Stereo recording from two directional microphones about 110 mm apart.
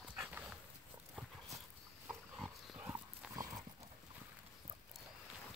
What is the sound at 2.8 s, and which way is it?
Horse, 25° right (ahead or behind).